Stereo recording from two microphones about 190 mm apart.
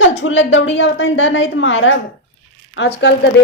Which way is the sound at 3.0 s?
70° left (ahead or behind).